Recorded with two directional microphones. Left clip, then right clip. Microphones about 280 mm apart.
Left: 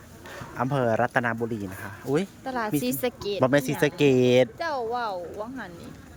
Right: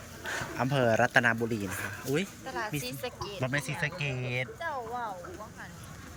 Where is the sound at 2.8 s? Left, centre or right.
Left.